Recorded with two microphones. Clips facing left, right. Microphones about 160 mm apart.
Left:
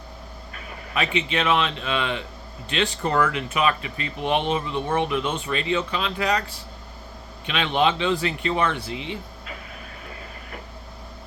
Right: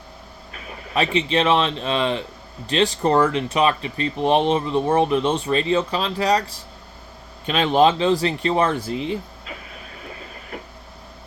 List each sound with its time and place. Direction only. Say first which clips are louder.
0.9 s speech: right 5 dB; 35° right (ahead or behind)